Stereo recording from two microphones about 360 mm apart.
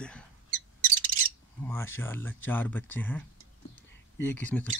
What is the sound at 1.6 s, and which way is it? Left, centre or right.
Speech, centre.